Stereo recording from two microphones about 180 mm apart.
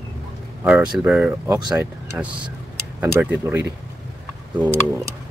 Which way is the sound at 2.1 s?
10° right (ahead or behind).